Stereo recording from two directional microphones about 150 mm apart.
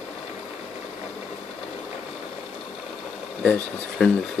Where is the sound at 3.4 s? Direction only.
5° left (ahead or behind).